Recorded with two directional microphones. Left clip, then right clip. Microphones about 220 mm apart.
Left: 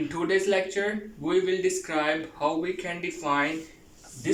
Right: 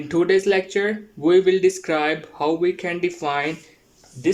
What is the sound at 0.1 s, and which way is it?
Speech, 50° right (ahead or behind).